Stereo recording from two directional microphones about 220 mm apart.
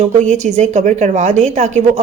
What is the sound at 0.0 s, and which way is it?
A woman's voice, 30° right (ahead or behind).